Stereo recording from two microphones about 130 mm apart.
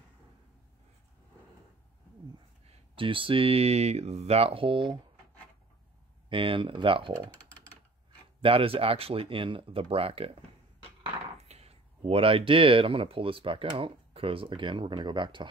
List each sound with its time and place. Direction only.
2.6 s speech: 40° right (ahead or behind)
6.2 s speech: 40° right (ahead or behind)
8.4 s speech: 45° right (ahead or behind)
11.3 s speech: 55° right (ahead or behind); by 15.5 s 35° right (ahead or behind)